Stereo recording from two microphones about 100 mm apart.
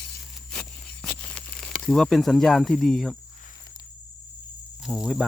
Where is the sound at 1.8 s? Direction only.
5° left (ahead or behind).